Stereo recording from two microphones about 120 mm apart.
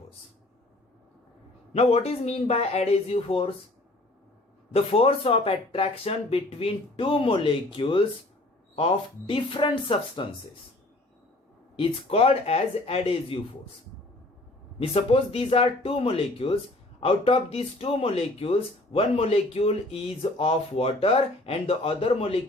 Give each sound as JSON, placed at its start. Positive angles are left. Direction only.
{"t": 1.7, "sound": "speech", "side_deg": 60}
{"t": 4.7, "sound": "speech", "side_deg": 55}
{"t": 11.8, "sound": "speech", "side_deg": 55}
{"t": 14.8, "sound": "speech", "side_deg": 55}